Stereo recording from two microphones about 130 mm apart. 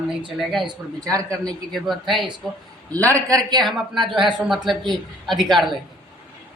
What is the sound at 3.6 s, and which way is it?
A woman's voice, centre (ahead or behind).